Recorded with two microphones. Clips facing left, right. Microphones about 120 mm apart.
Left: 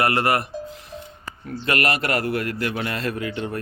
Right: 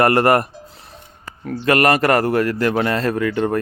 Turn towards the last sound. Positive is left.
turn(degrees=-50)  # may be behind; listen again after turning